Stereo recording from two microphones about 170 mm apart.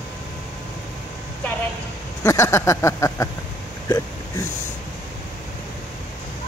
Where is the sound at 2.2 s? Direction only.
15° left (ahead or behind).